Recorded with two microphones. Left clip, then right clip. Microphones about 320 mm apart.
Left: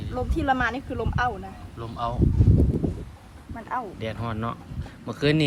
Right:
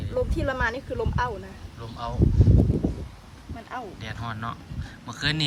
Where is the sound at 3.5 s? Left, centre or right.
Centre.